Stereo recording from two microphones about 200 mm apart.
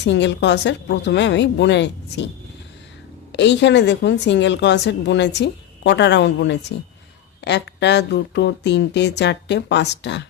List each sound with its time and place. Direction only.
0.0 s a woman's voice: 60° left (ahead or behind)
3.3 s a woman's voice: 60° left (ahead or behind)